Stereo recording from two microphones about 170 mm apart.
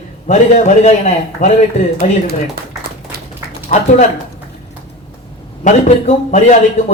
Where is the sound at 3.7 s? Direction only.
40° left (ahead or behind).